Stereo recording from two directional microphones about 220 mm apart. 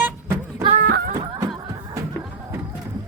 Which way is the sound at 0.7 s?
45° right (ahead or behind).